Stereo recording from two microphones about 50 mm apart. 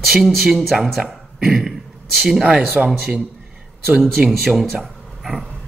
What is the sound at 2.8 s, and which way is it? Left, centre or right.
Speech, centre.